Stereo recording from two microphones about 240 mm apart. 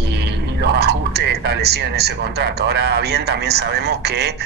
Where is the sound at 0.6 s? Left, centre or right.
Right.